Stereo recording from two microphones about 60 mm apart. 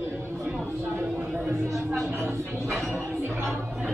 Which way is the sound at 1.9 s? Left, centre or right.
Centre.